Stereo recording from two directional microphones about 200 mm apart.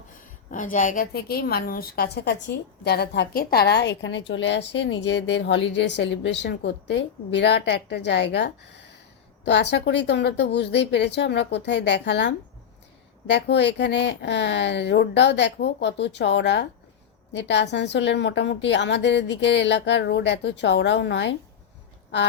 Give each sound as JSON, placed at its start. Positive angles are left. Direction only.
{"t": 0.5, "sound": "a woman's voice", "side_deg": 40}